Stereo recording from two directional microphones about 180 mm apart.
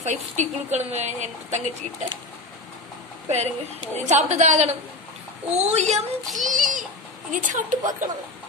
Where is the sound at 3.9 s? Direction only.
40° right (ahead or behind).